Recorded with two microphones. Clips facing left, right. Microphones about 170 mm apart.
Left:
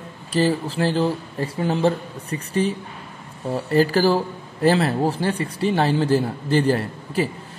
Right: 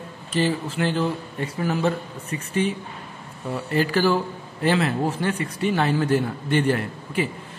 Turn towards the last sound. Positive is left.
turn(degrees=35)  # may be behind; listen again after turning